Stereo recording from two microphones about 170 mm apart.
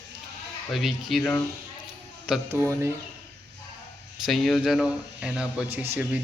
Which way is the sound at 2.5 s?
15° right (ahead or behind).